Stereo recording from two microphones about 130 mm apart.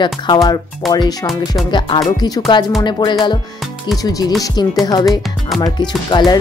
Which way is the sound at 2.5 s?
35° left (ahead or behind).